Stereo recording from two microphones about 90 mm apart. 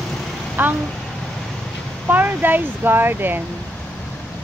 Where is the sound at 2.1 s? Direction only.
20° right (ahead or behind).